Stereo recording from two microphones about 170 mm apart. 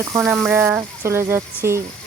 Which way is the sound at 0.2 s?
5° right (ahead or behind).